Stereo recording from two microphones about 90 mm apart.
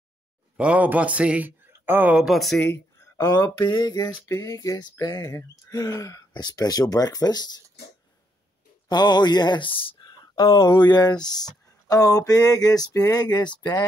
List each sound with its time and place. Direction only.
0.6 s speech: 15° right (ahead or behind)
2.1 s speech: centre (ahead or behind)
2.7 s speech: 35° left (ahead or behind)
4.3 s speech: 35° left (ahead or behind)
8.8 s speech: 50° left (ahead or behind)